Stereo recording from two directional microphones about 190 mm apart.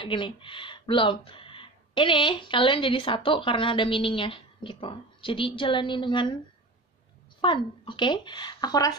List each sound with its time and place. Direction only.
0.0 s speech: 25° left (ahead or behind)
7.4 s speech: 25° left (ahead or behind)